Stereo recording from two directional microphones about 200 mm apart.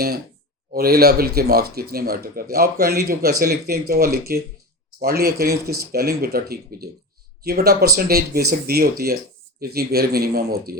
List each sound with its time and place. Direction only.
0.7 s speech: 50° right (ahead or behind)